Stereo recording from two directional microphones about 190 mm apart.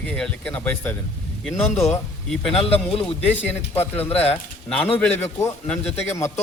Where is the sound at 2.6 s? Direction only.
30° left (ahead or behind).